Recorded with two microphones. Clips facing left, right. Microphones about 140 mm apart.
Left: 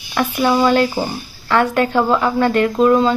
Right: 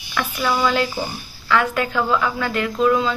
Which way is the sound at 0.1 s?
35° left (ahead or behind).